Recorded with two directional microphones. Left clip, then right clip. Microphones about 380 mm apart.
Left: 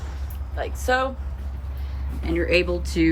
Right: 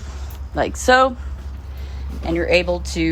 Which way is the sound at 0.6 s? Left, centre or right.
Centre.